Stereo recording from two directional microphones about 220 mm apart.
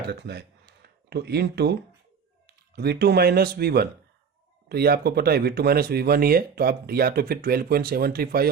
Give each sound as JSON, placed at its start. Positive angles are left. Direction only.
{"t": 0.1, "sound": "speech", "side_deg": -50}